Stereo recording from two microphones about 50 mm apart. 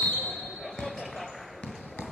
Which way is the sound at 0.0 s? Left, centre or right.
Left.